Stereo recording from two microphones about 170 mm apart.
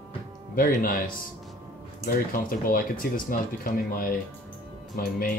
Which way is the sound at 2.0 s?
60° left (ahead or behind).